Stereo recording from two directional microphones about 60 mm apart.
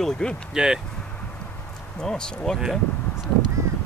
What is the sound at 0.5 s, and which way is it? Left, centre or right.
Speech, centre.